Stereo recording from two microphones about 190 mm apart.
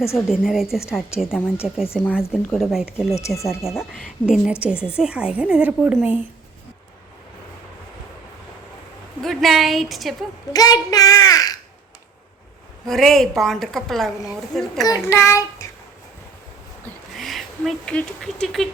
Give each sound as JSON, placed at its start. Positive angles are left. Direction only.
{"t": 0.3, "sound": "a woman's voice", "side_deg": 0}
{"t": 3.2, "sound": "child singing", "side_deg": 15}
{"t": 3.4, "sound": "a woman's voice", "side_deg": 0}
{"t": 9.2, "sound": "a woman's voice", "side_deg": 0}
{"t": 10.5, "sound": "a child's voice", "side_deg": 20}
{"t": 12.9, "sound": "a woman's voice", "side_deg": 0}
{"t": 14.8, "sound": "child singing", "side_deg": 15}
{"t": 17.2, "sound": "speech", "side_deg": 0}